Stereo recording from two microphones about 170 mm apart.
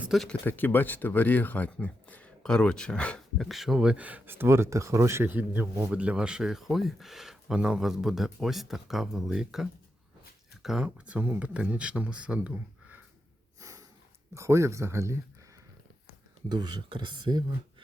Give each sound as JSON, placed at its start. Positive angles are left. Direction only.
{"t": 0.0, "sound": "speech", "side_deg": 0}
{"t": 13.6, "sound": "snort", "side_deg": -20}
{"t": 14.3, "sound": "speech", "side_deg": -15}
{"t": 16.5, "sound": "speech", "side_deg": -25}